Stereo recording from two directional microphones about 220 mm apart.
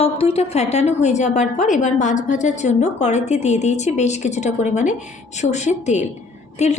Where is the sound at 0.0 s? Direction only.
25° left (ahead or behind).